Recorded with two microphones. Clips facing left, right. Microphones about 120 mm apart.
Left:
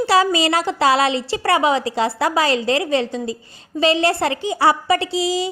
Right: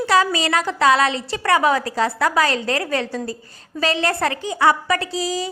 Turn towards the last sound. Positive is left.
turn(degrees=30)  # may be behind; listen again after turning